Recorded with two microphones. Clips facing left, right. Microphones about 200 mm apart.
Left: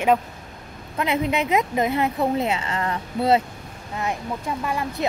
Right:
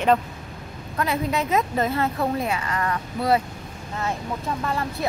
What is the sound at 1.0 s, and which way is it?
Speech, 20° left (ahead or behind).